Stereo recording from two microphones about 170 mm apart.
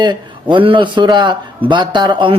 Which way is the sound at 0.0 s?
25° right (ahead or behind).